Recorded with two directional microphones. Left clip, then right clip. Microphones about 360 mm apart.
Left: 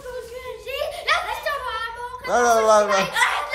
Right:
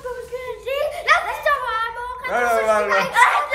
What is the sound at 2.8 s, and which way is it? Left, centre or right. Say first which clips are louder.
Speech: right 4 dB; centre.